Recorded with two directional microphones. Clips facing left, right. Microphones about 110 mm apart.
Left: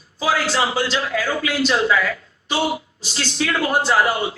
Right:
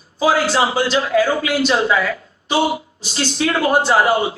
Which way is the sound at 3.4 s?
25° right (ahead or behind).